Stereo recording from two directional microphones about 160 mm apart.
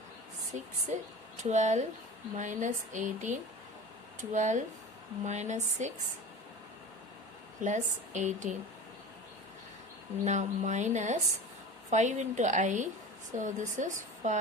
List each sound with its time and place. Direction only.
0.5 s a woman's voice: 45° right (ahead or behind)
7.6 s a woman's voice: 50° right (ahead or behind)
10.2 s a woman's voice: 50° right (ahead or behind)